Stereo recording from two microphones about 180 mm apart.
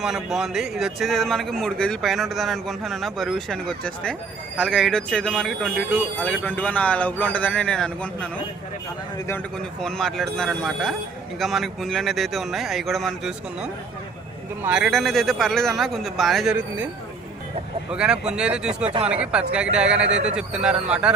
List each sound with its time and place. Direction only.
0.0 s a man's voice: 5° right (ahead or behind)
9.8 s a man's voice: centre (ahead or behind)
16.6 s speech: 10° right (ahead or behind)
17.9 s a man's voice: 5° right (ahead or behind)
20.1 s speech: 90° right
20.3 s a man's voice: 5° right (ahead or behind)